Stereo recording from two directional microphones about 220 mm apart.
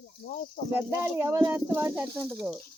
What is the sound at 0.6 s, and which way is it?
Speech, 40° left (ahead or behind).